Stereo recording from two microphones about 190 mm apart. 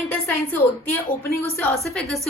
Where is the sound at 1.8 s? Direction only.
Centre (ahead or behind).